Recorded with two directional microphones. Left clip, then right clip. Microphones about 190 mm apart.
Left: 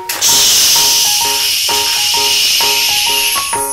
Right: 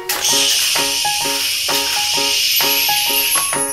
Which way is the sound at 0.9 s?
50° left (ahead or behind).